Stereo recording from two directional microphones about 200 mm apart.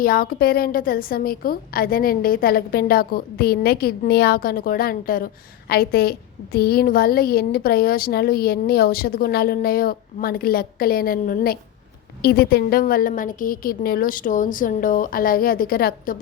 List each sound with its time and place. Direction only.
0.0 s a woman's voice: 45° left (ahead or behind)